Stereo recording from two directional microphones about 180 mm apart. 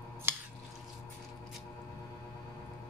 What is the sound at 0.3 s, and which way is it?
Drip, 10° right (ahead or behind).